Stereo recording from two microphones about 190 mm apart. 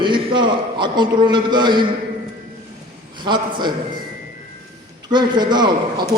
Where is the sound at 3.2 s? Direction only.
25° right (ahead or behind).